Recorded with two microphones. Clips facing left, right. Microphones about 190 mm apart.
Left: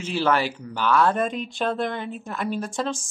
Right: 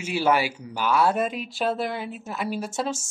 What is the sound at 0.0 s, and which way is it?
Speech, 10° right (ahead or behind).